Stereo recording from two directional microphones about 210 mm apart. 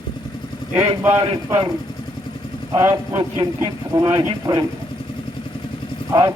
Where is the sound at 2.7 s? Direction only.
15° right (ahead or behind).